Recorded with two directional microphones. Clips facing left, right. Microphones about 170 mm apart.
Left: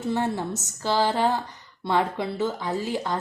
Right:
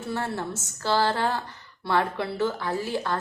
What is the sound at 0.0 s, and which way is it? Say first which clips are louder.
A woman's voice: left 4 dB; 15° left (ahead or behind).